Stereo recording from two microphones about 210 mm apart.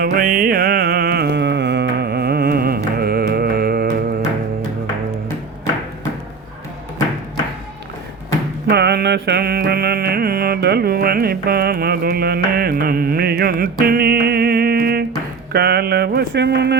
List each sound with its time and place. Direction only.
0.0 s music: 45° right (ahead or behind)
8.7 s mantra: 50° right (ahead or behind)
15.5 s a sound: 50° right (ahead or behind)